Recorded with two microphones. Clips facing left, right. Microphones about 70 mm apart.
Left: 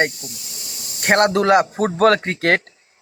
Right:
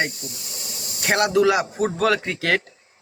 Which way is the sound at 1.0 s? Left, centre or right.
Left.